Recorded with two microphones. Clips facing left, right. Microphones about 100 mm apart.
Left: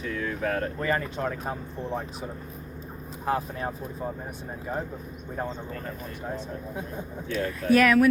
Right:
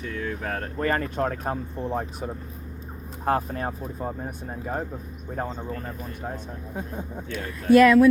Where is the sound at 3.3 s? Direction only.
50° right (ahead or behind).